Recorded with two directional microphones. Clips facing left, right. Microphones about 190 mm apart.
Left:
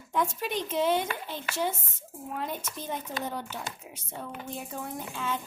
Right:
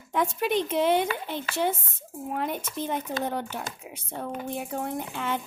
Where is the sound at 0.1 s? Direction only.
60° right (ahead or behind).